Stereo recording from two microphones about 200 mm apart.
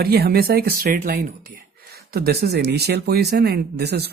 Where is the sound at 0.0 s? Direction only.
50° right (ahead or behind).